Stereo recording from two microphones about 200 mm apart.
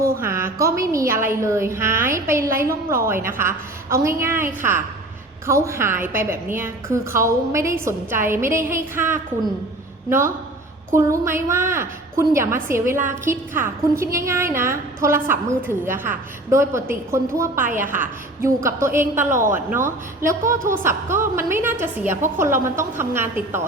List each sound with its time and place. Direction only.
0.2 s a woman's voice: 10° right (ahead or behind)
5.5 s a woman's voice: 15° right (ahead or behind)